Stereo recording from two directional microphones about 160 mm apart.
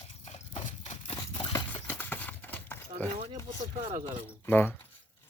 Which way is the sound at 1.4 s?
25° left (ahead or behind).